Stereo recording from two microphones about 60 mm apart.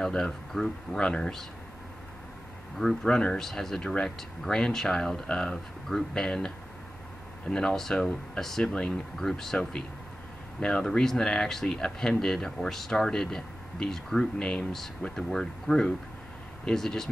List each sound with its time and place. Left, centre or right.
0.0 s speech: centre
2.8 s speech: centre